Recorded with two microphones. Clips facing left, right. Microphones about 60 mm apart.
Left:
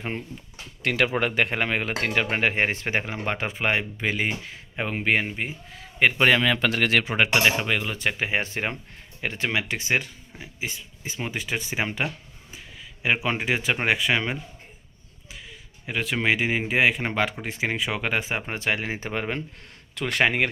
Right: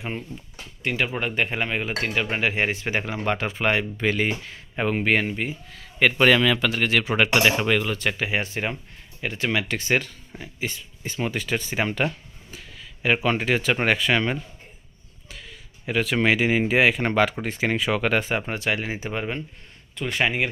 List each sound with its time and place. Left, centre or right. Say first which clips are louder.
0.8 s speech: left 2 dB; left
2.3 s speech: even; left
3.0 s speech: right 3 dB; left
6.0 s speech: right 2 dB; centre
6.4 s speech: right 1 dB; left
6.7 s speech: even; left
7.1 s speech: right 1 dB; centre
7.5 s speech: right 3 dB; centre
7.8 s speech: right 2 dB; centre; by 9.5 s left
9.5 s speech: right 3 dB; centre
18.5 s speech: right 1 dB; left
20.0 s speech: left 1 dB; left